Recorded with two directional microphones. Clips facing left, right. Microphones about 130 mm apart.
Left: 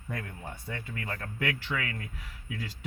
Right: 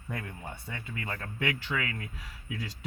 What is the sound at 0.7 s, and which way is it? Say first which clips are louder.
Speech: left 1 dB; centre (ahead or behind).